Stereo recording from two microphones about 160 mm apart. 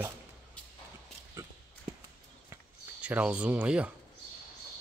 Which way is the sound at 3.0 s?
10° right (ahead or behind).